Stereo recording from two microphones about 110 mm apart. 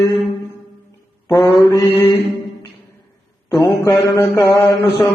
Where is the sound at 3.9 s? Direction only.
30° left (ahead or behind).